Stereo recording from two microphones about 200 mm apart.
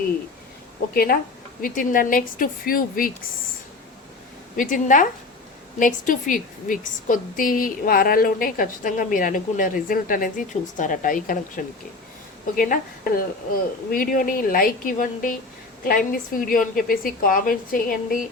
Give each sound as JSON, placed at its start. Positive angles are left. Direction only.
{"t": 1.6, "sound": "a woman's voice", "side_deg": 45}
{"t": 4.5, "sound": "a woman's voice", "side_deg": 40}